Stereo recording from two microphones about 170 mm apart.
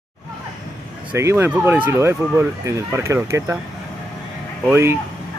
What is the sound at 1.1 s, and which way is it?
Speech, 15° right (ahead or behind).